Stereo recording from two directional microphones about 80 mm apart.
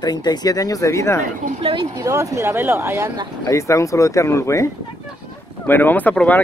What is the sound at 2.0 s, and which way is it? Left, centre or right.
Speech, right.